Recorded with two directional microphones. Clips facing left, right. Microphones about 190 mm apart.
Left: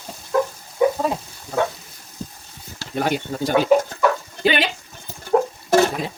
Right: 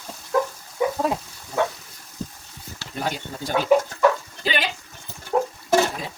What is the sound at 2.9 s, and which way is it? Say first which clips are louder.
Speech: left 7 dB; 70° left (ahead or behind).